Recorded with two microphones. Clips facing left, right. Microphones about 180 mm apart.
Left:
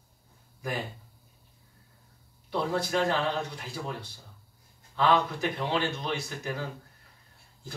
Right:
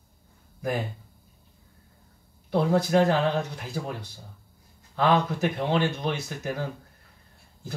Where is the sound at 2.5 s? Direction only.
50° right (ahead or behind).